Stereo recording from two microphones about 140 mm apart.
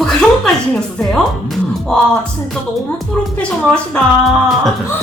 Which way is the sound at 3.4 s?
10° left (ahead or behind).